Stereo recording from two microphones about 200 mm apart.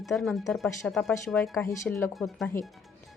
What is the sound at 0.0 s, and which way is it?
Speech, centre (ahead or behind).